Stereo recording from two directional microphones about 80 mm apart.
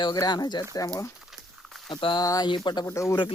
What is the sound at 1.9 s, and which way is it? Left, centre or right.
Speech, left.